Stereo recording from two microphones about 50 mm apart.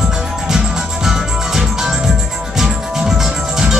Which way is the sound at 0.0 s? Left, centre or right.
Centre.